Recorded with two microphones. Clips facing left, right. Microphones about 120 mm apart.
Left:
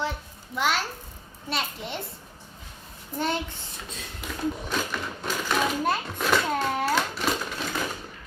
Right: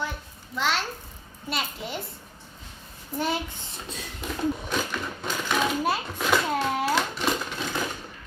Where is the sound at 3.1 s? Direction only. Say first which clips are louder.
Even; 5° right (ahead or behind).